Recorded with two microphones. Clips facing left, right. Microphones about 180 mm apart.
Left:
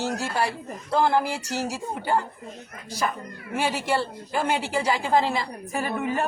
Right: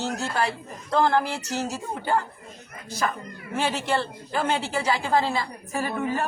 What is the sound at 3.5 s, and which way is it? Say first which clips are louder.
A woman's voice: even; 10° left (ahead or behind).